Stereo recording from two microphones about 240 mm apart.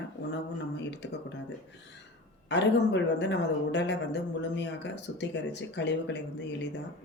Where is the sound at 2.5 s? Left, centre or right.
Left.